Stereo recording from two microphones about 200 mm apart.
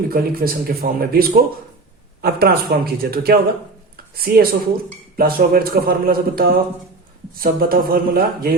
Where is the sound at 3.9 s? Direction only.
50° right (ahead or behind).